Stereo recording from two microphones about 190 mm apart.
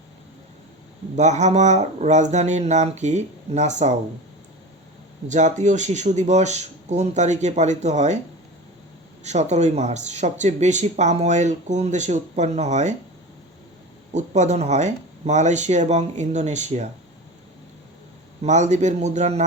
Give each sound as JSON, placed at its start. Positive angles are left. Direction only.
{"t": 1.1, "sound": "speech", "side_deg": -40}
{"t": 5.3, "sound": "speech", "side_deg": -40}
{"t": 9.2, "sound": "speech", "side_deg": -35}
{"t": 14.1, "sound": "speech", "side_deg": -35}
{"t": 18.4, "sound": "speech", "side_deg": -40}